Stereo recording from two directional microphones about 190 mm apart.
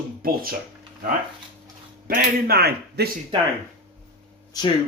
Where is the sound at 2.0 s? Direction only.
45° right (ahead or behind).